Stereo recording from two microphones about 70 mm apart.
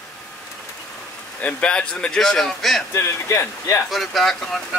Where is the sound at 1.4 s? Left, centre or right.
Centre.